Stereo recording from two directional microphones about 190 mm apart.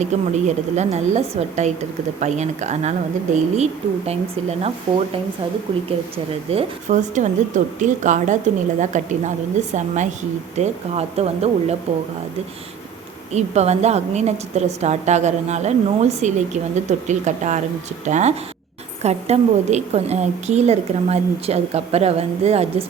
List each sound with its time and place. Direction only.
0.0 s a woman's voice: 40° right (ahead or behind)
6.5 s a woman's voice: 35° right (ahead or behind)
13.3 s a woman's voice: 35° right (ahead or behind)